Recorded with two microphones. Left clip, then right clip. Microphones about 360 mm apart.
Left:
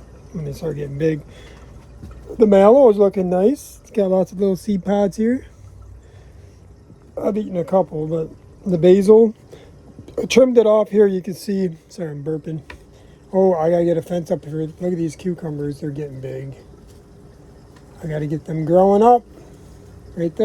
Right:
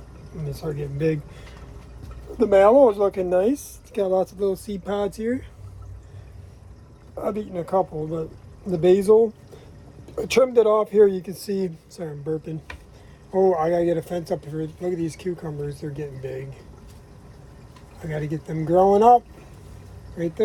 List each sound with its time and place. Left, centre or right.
0.5 s speech: left
2.4 s speech: left
7.2 s speech: left
18.1 s speech: left
20.1 s speech: left